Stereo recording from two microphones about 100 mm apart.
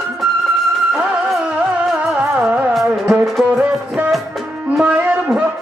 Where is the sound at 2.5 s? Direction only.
5° right (ahead or behind).